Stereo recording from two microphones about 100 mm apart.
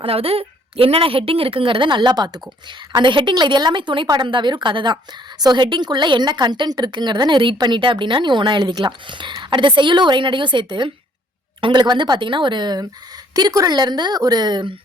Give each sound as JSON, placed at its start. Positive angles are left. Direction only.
{"t": 0.0, "sound": "a woman's voice", "side_deg": -70}